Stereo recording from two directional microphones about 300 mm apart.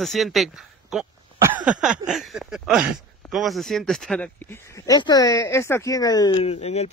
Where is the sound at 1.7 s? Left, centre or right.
Centre.